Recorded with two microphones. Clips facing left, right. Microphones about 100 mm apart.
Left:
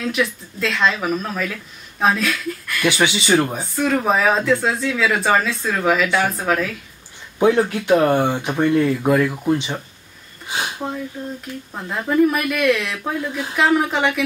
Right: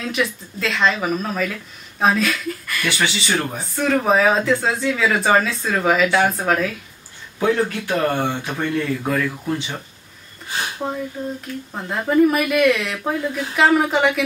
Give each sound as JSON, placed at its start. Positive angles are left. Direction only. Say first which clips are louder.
{"t": 0.0, "sound": "speech", "louder": "left 1 dB", "side_deg": 0}
{"t": 2.8, "sound": "speech", "louder": "left 4 dB", "side_deg": 15}
{"t": 3.5, "sound": "speech", "louder": "even", "side_deg": 0}
{"t": 7.3, "sound": "speech", "louder": "left 3 dB", "side_deg": 20}
{"t": 10.8, "sound": "speech", "louder": "right 2 dB", "side_deg": 0}